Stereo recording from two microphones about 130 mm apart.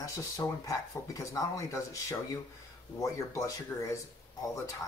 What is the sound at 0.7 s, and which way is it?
Speech, 25° left (ahead or behind).